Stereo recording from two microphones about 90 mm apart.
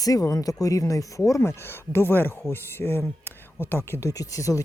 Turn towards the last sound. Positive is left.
turn(degrees=40)  # may be behind; listen again after turning